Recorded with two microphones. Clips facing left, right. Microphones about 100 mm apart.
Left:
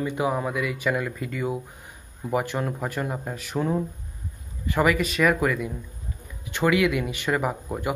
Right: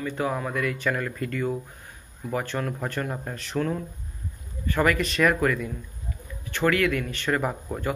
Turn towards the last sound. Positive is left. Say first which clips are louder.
# left 1 dB
turn(degrees=10)  # may be behind; listen again after turning